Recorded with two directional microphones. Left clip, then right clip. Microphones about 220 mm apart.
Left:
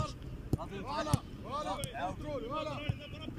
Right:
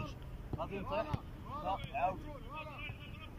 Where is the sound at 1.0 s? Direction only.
45° left (ahead or behind).